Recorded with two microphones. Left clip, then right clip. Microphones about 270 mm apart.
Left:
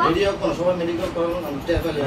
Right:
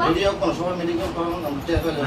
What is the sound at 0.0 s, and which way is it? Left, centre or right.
Speech, centre.